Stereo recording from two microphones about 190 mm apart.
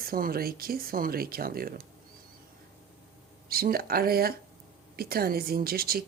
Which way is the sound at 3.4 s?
50° right (ahead or behind).